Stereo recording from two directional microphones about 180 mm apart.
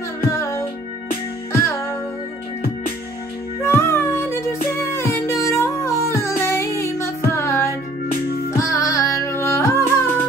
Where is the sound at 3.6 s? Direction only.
15° left (ahead or behind).